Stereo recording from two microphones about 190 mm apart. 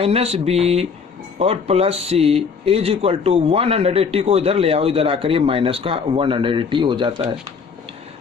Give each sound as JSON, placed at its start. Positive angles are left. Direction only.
{"t": 0.0, "sound": "speech", "side_deg": -30}